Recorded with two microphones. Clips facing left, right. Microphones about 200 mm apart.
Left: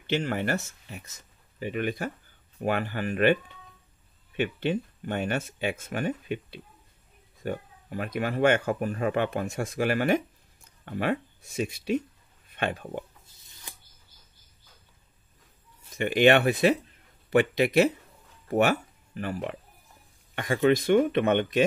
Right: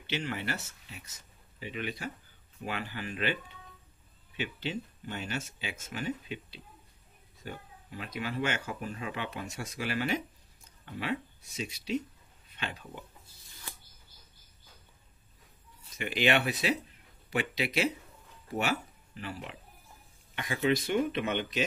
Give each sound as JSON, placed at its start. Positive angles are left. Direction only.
{"t": 0.0, "sound": "speech", "side_deg": 50}
{"t": 4.4, "sound": "speech", "side_deg": 55}
{"t": 16.0, "sound": "speech", "side_deg": 55}